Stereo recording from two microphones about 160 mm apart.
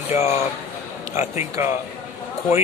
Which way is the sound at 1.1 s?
15° right (ahead or behind).